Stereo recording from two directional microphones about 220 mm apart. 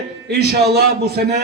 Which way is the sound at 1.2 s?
45° right (ahead or behind).